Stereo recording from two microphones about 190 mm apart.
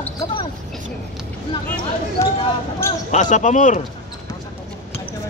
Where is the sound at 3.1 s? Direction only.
40° left (ahead or behind).